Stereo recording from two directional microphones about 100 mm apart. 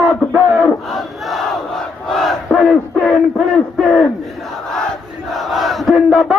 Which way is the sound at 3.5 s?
10° left (ahead or behind).